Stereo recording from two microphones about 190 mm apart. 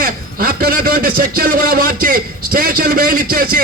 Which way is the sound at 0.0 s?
50° right (ahead or behind).